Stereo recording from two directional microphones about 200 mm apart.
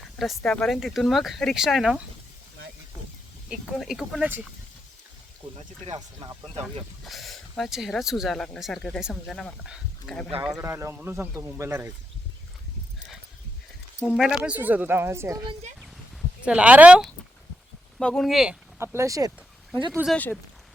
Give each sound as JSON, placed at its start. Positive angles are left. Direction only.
{"t": 0.0, "sound": "speech", "side_deg": 0}
{"t": 3.7, "sound": "speech", "side_deg": 0}
{"t": 5.8, "sound": "speech", "side_deg": -25}
{"t": 7.0, "sound": "speech", "side_deg": 0}
{"t": 10.4, "sound": "speech", "side_deg": -15}
{"t": 14.1, "sound": "speech", "side_deg": 0}
{"t": 18.9, "sound": "speech", "side_deg": -15}
{"t": 19.9, "sound": "speech", "side_deg": 0}